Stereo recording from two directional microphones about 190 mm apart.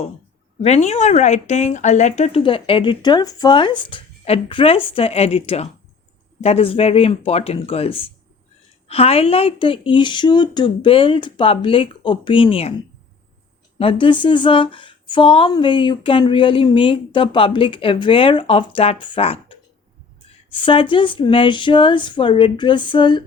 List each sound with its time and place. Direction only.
0.6 s speech: 35° left (ahead or behind)
13.7 s speech: 30° left (ahead or behind)